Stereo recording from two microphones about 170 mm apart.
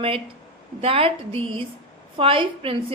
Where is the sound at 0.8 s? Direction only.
35° right (ahead or behind).